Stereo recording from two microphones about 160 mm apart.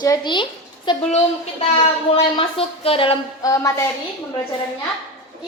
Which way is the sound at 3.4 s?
20° left (ahead or behind).